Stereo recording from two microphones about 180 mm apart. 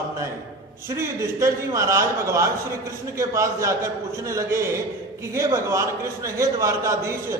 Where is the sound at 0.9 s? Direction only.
15° right (ahead or behind).